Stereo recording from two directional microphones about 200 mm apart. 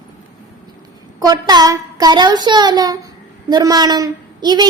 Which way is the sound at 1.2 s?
20° right (ahead or behind).